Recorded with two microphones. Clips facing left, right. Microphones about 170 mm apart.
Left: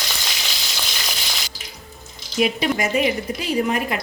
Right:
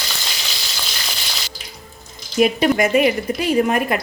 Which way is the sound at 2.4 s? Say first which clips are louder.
Right 5 dB; 50° right (ahead or behind).